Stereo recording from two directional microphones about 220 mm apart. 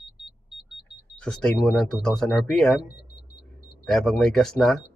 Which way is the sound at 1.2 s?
5° left (ahead or behind).